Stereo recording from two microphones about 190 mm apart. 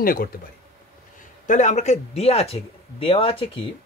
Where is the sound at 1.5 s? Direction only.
40° left (ahead or behind).